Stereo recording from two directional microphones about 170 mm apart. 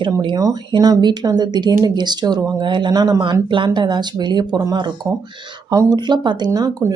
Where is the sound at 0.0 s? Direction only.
30° right (ahead or behind).